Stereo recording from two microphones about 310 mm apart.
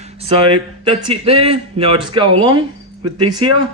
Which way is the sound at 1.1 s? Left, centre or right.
Centre.